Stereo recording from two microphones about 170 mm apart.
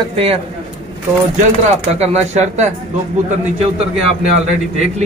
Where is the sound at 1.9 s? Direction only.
40° right (ahead or behind).